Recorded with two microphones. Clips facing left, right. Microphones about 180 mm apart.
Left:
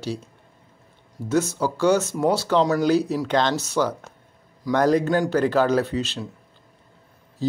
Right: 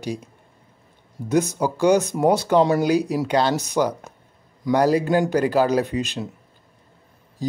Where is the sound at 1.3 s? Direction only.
15° right (ahead or behind).